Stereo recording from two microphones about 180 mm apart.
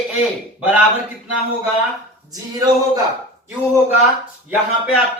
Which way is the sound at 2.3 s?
20° right (ahead or behind).